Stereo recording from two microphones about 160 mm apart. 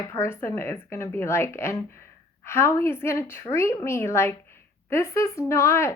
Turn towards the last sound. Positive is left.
turn(degrees=15)  # may be behind; listen again after turning